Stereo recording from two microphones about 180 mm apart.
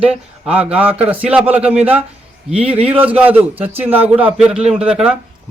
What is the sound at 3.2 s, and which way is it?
A man's voice, 10° right (ahead or behind).